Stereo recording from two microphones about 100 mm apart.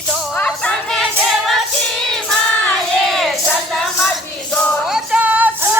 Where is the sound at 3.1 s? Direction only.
5° left (ahead or behind).